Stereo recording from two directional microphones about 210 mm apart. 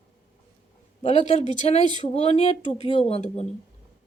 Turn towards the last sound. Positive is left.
turn(degrees=30)  # may be behind; listen again after turning